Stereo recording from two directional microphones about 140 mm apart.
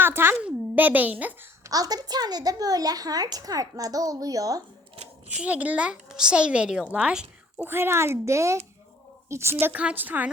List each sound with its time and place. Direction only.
0.0 s a sound: 15° right (ahead or behind)
0.3 s a child's voice: 10° right (ahead or behind)
1.7 s a woman's voice: 25° right (ahead or behind)
5.4 s speech: 10° right (ahead or behind)